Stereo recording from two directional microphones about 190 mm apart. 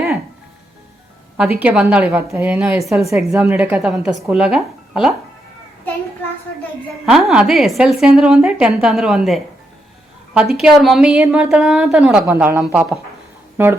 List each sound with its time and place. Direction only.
1.5 s a woman's voice: 10° right (ahead or behind)
3.0 s a woman's voice: 15° right (ahead or behind)
7.0 s a woman's voice: centre (ahead or behind)